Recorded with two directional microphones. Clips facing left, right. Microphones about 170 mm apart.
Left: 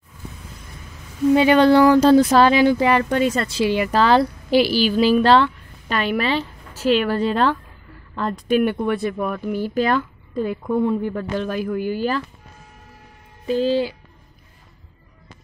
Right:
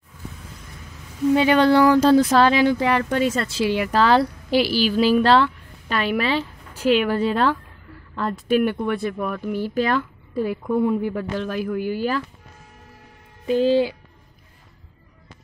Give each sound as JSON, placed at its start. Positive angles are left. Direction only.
{"t": 1.3, "sound": "speech", "side_deg": 15}
{"t": 2.3, "sound": "speech", "side_deg": 5}
{"t": 13.5, "sound": "speech", "side_deg": -15}